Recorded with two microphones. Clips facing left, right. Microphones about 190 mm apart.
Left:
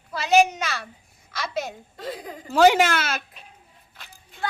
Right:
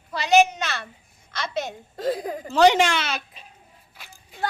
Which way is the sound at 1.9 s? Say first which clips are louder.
Right 10 dB; 40° right (ahead or behind).